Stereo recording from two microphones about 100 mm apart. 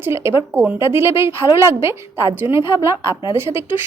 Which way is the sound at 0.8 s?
25° right (ahead or behind).